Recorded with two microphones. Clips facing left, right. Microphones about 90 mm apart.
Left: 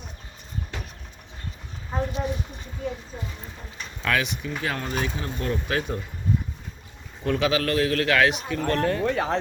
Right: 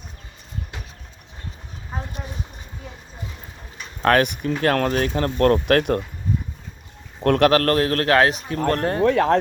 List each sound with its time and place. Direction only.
4.0 s speech: 50° right (ahead or behind); by 6.0 s 70° right (ahead or behind)
7.2 s a man's voice: 60° right (ahead or behind); by 9.0 s 40° right (ahead or behind)
9.0 s speech: 65° right (ahead or behind)